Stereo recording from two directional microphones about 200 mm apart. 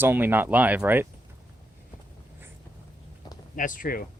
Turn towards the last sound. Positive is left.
turn(degrees=45)  # may be behind; listen again after turning